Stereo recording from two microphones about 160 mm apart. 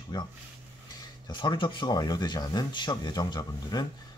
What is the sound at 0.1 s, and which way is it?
Speech, 25° left (ahead or behind).